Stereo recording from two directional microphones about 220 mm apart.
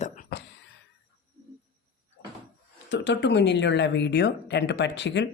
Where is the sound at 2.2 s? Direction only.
60° left (ahead or behind).